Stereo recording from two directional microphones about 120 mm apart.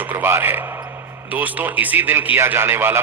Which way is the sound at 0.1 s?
15° right (ahead or behind).